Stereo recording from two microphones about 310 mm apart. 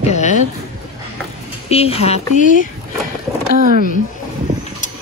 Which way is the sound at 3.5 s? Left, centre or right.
Right.